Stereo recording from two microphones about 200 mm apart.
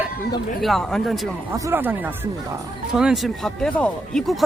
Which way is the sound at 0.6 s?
Centre (ahead or behind).